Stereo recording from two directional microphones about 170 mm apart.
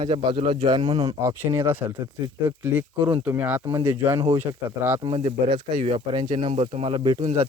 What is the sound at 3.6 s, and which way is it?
Speech, 20° right (ahead or behind).